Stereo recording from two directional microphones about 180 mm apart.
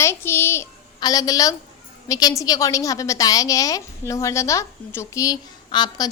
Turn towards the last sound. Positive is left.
turn(degrees=25)  # may be behind; listen again after turning